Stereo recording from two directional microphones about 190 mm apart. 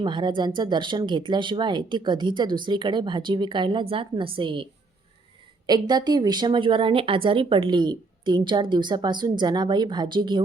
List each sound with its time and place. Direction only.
0.0 s a woman's voice: 25° right (ahead or behind)
5.6 s a woman's voice: 20° right (ahead or behind)